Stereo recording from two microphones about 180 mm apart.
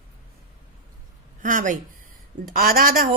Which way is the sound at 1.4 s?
45° right (ahead or behind).